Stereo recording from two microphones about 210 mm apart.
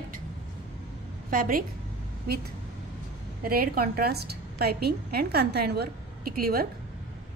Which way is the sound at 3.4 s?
45° right (ahead or behind).